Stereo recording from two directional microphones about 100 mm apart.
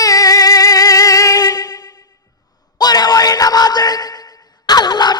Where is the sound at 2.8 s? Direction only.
40° left (ahead or behind).